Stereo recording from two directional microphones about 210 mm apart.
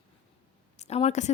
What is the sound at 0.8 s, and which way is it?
Speech, 30° left (ahead or behind).